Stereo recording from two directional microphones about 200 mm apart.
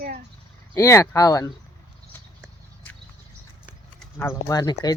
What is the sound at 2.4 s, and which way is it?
Horse, 5° left (ahead or behind).